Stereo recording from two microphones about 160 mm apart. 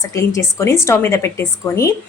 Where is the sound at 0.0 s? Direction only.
20° left (ahead or behind).